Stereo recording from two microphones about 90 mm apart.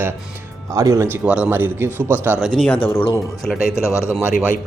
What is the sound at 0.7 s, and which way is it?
Speech, 40° right (ahead or behind).